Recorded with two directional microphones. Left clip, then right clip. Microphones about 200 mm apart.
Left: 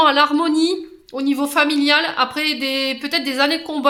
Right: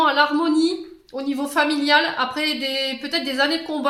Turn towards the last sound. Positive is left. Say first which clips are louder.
# left 3 dB
turn(degrees=35)  # may be behind; listen again after turning